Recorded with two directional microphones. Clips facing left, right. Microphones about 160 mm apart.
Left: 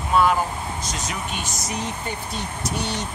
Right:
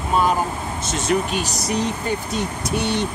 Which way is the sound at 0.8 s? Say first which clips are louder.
Right 4 dB; 25° right (ahead or behind).